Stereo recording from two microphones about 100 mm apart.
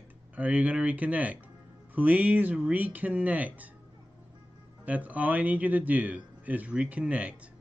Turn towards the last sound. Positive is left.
turn(degrees=-15)  # may be behind; listen again after turning